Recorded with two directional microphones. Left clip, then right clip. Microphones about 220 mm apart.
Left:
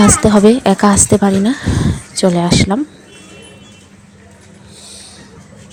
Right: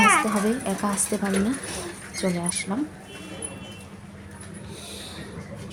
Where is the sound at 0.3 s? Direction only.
40° left (ahead or behind).